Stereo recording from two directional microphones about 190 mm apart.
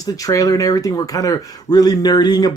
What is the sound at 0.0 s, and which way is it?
Speech, 20° left (ahead or behind).